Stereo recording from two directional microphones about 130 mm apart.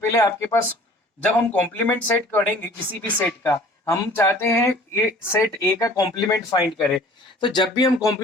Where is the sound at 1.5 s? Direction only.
15° left (ahead or behind).